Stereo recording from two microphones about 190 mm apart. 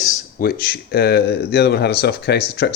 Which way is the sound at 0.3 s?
50° left (ahead or behind).